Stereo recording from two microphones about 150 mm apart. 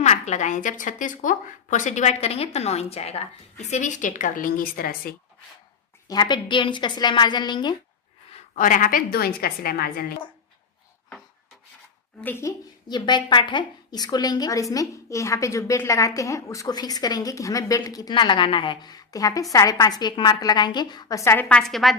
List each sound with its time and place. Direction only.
0.0 s a woman's voice: 50° left (ahead or behind); by 5.1 s 75° left (ahead or behind)
6.1 s a woman's voice: 30° left (ahead or behind)
8.5 s a woman's voice: 65° left (ahead or behind); by 10.2 s 90° left
12.2 s a woman's voice: 15° left (ahead or behind)
21.5 s a woman's voice: centre (ahead or behind)